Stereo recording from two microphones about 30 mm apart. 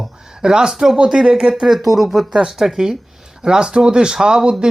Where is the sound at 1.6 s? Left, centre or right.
Centre.